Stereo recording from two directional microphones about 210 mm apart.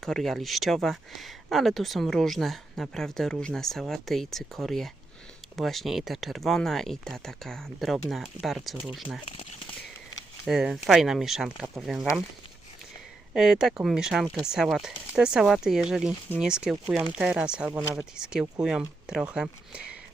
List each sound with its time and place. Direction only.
0.0 s speech: centre (ahead or behind)
9.2 s speech: 30° left (ahead or behind)
10.4 s speech: 5° right (ahead or behind)
13.3 s speech: centre (ahead or behind)
17.7 s speech: 20° right (ahead or behind)
18.2 s speech: 5° right (ahead or behind)